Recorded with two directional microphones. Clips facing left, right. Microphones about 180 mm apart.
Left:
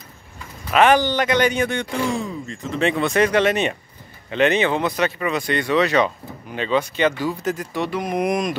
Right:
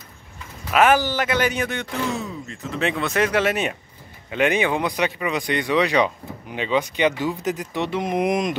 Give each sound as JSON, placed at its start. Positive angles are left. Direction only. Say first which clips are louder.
{"t": 0.7, "sound": "speech", "louder": "left 2 dB", "side_deg": -5}